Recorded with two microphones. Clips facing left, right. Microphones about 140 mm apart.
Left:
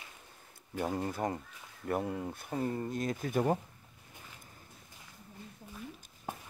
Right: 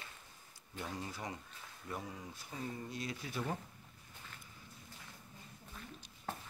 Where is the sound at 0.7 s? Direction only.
55° left (ahead or behind).